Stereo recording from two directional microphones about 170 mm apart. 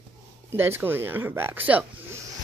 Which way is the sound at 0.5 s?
15° right (ahead or behind).